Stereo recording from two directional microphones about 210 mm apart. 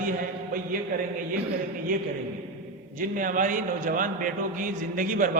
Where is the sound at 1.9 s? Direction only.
40° right (ahead or behind).